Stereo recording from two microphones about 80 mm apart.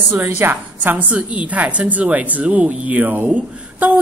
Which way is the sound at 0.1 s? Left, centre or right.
Right.